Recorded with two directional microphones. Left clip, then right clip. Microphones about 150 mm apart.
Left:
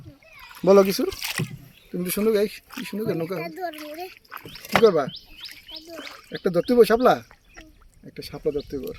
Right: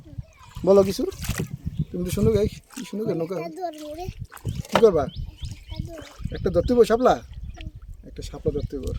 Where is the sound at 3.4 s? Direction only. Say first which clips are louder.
Even; 20° right (ahead or behind).